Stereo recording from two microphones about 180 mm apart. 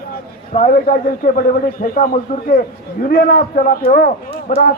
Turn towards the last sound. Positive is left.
turn(degrees=50)  # may be behind; listen again after turning